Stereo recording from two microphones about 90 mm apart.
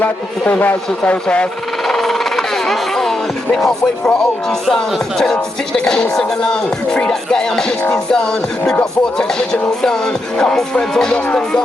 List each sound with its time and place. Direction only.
0.0 s music: 20° left (ahead or behind)
1.9 s speech: 5° left (ahead or behind)
7.9 s music: 5° left (ahead or behind)